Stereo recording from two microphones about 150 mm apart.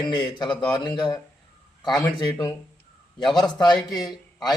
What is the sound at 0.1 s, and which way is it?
A man's voice, 30° left (ahead or behind).